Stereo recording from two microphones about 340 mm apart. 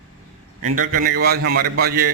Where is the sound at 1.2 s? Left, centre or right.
Right.